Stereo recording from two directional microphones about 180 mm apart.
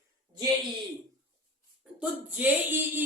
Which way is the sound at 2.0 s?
10° right (ahead or behind).